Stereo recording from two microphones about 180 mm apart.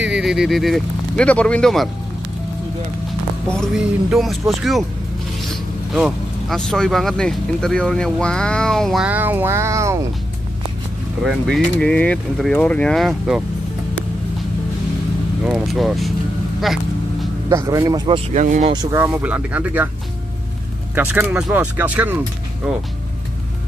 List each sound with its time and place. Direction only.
0.0 s speech: 5° right (ahead or behind)
3.5 s speech: centre (ahead or behind)
5.9 s speech: centre (ahead or behind); by 9.9 s 15° right (ahead or behind)
11.2 s speech: centre (ahead or behind)
15.4 s speech: centre (ahead or behind)
16.6 s a sound: centre (ahead or behind)
17.5 s speech: 20° right (ahead or behind)
18.3 s speech: 40° right (ahead or behind)
18.7 s speech: 25° right (ahead or behind)
18.9 s speech: 10° right (ahead or behind)
20.9 s speech: 10° right (ahead or behind)